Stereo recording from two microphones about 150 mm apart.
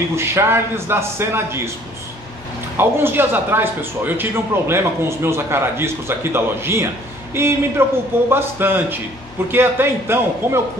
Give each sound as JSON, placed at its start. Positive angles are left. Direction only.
{"t": 0.1, "sound": "a man's voice", "side_deg": -15}
{"t": 2.8, "sound": "a man's voice", "side_deg": -15}